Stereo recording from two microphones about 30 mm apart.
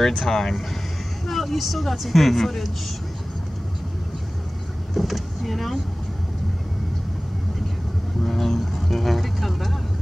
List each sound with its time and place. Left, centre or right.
0.0 s speech: centre
1.3 s speech: centre
4.9 s speech: centre
8.3 s speech: centre
8.8 s vehicle: centre